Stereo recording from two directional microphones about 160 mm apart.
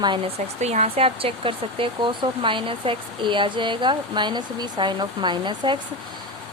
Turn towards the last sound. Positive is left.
turn(degrees=-30)  # may be behind; listen again after turning